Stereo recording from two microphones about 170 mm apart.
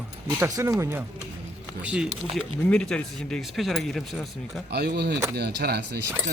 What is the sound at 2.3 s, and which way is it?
Speech, 5° left (ahead or behind).